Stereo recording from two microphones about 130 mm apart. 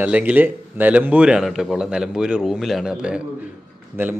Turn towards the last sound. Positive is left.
turn(degrees=-20)  # may be behind; listen again after turning